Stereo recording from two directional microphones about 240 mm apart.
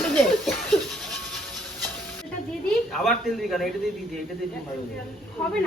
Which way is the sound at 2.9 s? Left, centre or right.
Centre.